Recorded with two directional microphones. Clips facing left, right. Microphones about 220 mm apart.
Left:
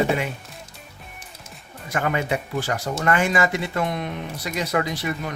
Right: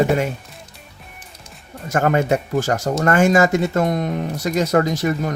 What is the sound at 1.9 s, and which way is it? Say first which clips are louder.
Speech: right 6 dB; 45° right (ahead or behind).